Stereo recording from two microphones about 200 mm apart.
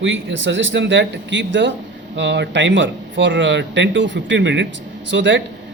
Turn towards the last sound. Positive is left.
turn(degrees=-65)  # may be behind; listen again after turning